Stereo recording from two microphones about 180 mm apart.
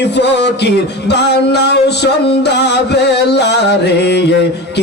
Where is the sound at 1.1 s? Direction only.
70° left (ahead or behind).